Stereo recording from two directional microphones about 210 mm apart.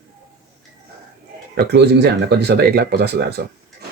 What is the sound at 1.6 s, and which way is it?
Speech, 50° right (ahead or behind).